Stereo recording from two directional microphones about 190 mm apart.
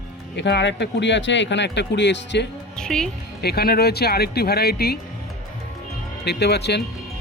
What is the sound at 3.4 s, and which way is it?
A man's voice, 55° left (ahead or behind).